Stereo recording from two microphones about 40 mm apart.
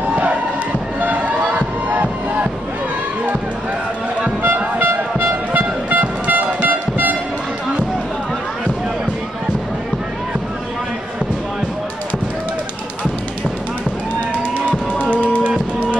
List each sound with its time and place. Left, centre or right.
0.1 s crowd: right
1.0 s a sound: right
1.9 s music: right
4.7 s vehicle: right